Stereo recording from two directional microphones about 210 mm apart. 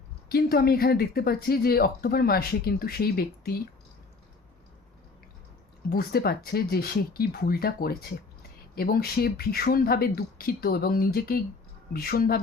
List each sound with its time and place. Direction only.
0.3 s speech: 45° left (ahead or behind)
5.9 s speech: 45° left (ahead or behind)